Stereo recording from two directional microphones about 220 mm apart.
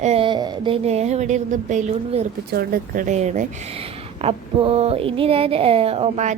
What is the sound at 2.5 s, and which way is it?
A woman's voice, 45° right (ahead or behind).